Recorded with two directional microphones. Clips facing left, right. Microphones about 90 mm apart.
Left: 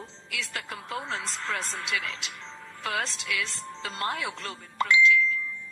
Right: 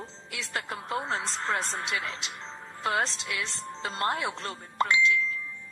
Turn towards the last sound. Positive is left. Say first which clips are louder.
# left 4 dB
turn(degrees=-35)  # may be behind; listen again after turning